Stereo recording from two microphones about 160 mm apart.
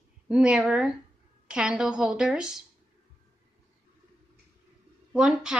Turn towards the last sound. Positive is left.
turn(degrees=-5)  # may be behind; listen again after turning